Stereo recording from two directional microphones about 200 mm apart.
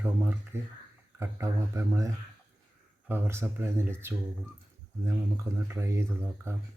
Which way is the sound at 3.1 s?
10° right (ahead or behind).